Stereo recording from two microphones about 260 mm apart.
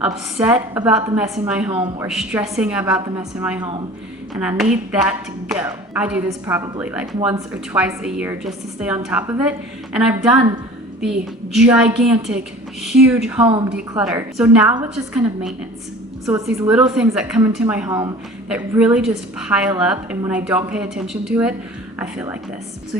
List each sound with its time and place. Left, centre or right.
0.0 s a woman's voice: centre
1.7 s speech: centre
2.0 s a woman's voice: centre
11.5 s a woman's voice: centre